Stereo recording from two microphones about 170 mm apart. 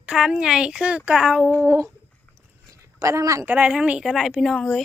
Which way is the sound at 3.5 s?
5° right (ahead or behind).